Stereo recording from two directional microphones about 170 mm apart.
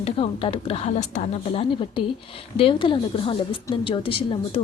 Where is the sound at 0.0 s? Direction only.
35° left (ahead or behind).